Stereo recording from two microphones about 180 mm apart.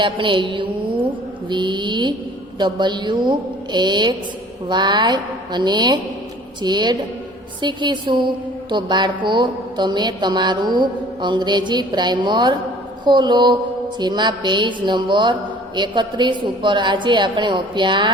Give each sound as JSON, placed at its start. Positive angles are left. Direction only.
{"t": 0.0, "sound": "a woman's voice", "side_deg": -30}